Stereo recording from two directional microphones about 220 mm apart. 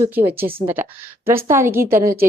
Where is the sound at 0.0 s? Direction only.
10° right (ahead or behind).